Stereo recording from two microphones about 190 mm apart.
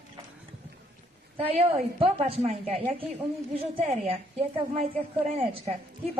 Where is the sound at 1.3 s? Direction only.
30° right (ahead or behind).